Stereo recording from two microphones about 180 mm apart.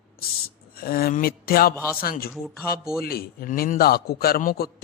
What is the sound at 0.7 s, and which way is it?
A man's voice, 55° left (ahead or behind).